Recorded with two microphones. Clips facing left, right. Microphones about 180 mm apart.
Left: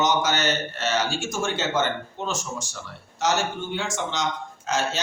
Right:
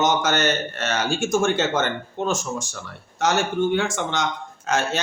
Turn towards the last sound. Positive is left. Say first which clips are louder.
# right 3 dB
turn(degrees=-55)  # may be behind; listen again after turning